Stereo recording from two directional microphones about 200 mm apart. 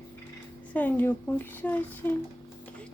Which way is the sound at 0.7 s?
10° left (ahead or behind).